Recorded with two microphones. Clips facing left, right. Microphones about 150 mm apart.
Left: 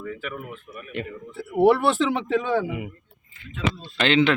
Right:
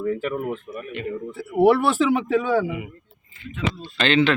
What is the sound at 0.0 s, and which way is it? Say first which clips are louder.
Speech: right 9 dB; 40° right (ahead or behind).